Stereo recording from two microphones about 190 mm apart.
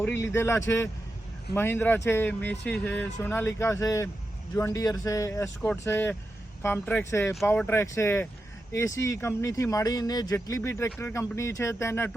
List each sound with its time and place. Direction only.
0.0 s speech: 10° left (ahead or behind)